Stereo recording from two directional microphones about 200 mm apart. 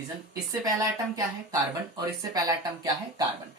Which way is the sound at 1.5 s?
20° right (ahead or behind).